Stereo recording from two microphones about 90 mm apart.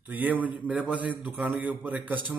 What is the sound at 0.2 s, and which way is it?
A man's voice, 15° right (ahead or behind).